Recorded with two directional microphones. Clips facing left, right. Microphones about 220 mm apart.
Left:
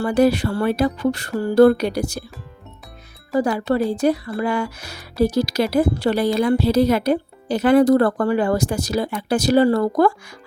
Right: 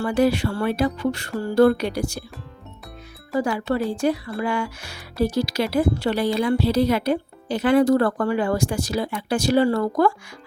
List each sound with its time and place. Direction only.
0.0 s speech: 40° left (ahead or behind)
3.4 s speech: 35° left (ahead or behind)